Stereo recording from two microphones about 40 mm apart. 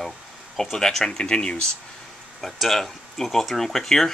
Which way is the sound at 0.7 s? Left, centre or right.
Centre.